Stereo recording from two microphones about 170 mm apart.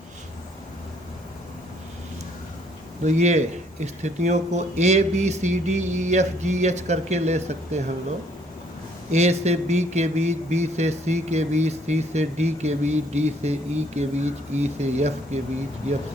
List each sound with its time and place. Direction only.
3.0 s speech: 45° right (ahead or behind)
9.1 s speech: 40° right (ahead or behind)